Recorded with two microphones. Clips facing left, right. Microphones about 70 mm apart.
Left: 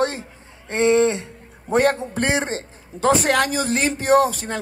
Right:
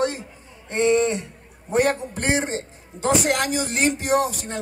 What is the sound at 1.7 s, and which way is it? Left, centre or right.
Speech, left.